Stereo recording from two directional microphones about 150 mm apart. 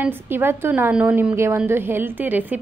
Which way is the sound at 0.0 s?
15° right (ahead or behind).